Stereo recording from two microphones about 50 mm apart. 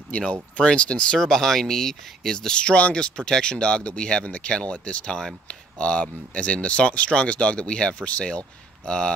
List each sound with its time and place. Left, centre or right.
0.1 s speech: left